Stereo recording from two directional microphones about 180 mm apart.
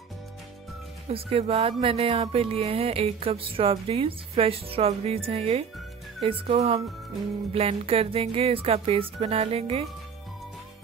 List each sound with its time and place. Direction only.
1.0 s speech: 35° right (ahead or behind)